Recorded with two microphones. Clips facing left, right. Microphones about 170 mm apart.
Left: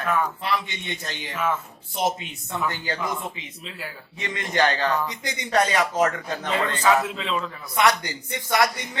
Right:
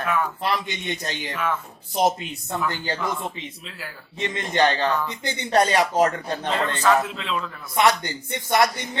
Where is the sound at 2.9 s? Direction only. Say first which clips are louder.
Right 1 dB; centre (ahead or behind).